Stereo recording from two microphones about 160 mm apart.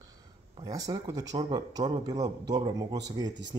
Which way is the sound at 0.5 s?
25° right (ahead or behind).